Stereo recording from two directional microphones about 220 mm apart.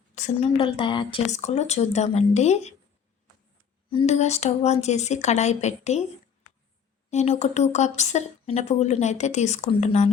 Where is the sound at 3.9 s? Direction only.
25° left (ahead or behind).